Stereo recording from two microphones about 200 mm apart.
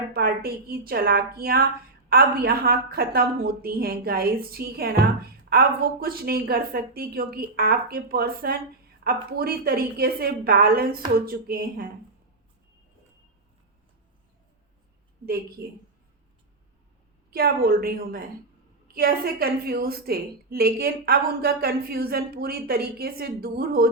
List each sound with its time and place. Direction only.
0.1 s a woman's voice: 50° right (ahead or behind)
17.3 s a woman's voice: 50° right (ahead or behind)